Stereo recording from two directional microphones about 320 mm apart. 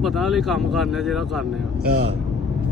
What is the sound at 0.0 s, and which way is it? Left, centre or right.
Speech, centre.